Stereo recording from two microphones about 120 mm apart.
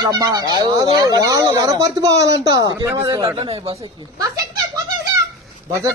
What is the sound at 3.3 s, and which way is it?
Speech, 55° right (ahead or behind).